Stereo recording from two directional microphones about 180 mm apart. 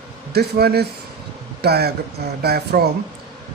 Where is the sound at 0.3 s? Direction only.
60° right (ahead or behind).